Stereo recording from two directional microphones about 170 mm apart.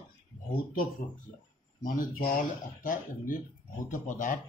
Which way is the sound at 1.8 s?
55° left (ahead or behind).